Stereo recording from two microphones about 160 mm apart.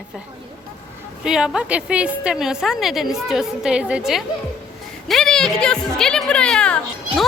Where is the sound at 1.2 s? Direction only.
5° right (ahead or behind).